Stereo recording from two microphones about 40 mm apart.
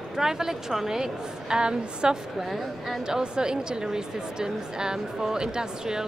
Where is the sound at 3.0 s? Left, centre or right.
Centre.